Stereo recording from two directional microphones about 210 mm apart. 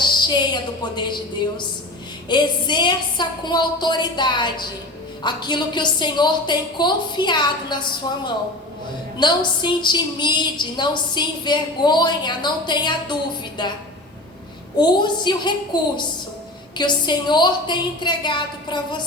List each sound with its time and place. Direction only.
0.0 s a woman's voice: 20° left (ahead or behind)
2.3 s a woman's voice: 20° left (ahead or behind)
14.8 s a woman's voice: 20° left (ahead or behind)